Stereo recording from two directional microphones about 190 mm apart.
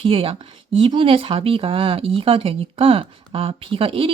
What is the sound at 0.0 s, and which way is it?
Speech, 30° right (ahead or behind).